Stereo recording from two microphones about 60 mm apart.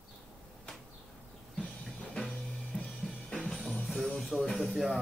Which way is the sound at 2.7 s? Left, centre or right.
Centre.